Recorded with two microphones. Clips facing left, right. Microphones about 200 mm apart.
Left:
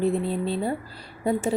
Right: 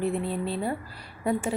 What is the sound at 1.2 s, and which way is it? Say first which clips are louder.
Speech: left 3 dB; 25° left (ahead or behind).